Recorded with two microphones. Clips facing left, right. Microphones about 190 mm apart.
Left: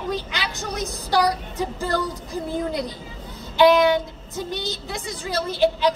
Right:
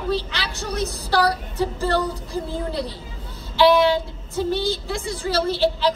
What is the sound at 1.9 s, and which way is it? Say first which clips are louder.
A woman's voice: right 2 dB; 15° left (ahead or behind).